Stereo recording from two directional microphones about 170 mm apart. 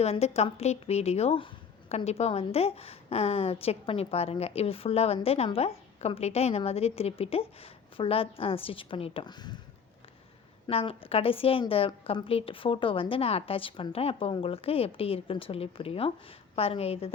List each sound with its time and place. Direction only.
0.0 s a woman's voice: 40° left (ahead or behind)
10.7 s a woman's voice: 35° left (ahead or behind)